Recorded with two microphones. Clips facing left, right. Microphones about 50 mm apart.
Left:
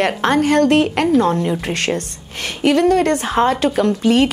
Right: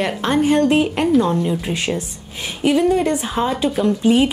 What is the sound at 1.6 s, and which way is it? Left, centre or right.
A woman's voice, left.